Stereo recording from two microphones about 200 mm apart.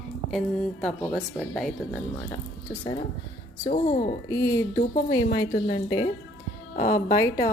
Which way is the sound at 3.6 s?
30° left (ahead or behind).